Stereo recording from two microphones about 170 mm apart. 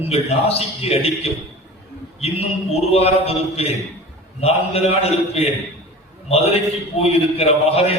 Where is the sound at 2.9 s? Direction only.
35° left (ahead or behind).